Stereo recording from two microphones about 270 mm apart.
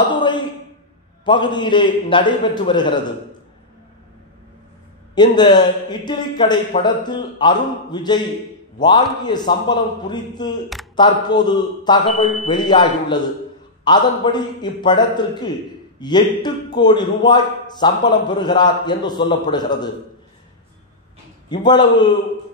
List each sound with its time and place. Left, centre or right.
0.1 s a sound: centre
1.2 s a man's voice: centre
5.1 s a man's voice: centre
21.5 s a man's voice: centre